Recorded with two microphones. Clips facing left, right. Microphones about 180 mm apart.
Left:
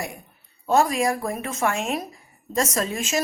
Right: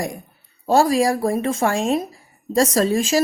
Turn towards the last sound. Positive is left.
turn(degrees=-35)  # may be behind; listen again after turning